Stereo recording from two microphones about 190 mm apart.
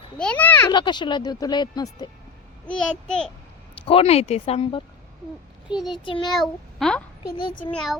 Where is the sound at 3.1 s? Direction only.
5° left (ahead or behind).